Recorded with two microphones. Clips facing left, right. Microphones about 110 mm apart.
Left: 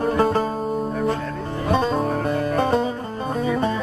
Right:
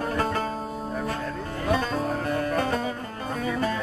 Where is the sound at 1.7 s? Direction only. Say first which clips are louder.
Left 6 dB; 25° left (ahead or behind).